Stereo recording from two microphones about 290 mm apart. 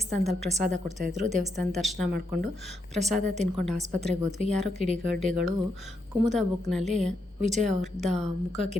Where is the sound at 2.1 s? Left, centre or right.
Right.